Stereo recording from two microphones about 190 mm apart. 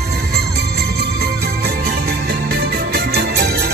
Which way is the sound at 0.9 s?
60° right (ahead or behind).